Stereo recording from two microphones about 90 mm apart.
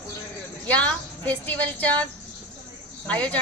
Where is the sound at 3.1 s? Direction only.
15° left (ahead or behind).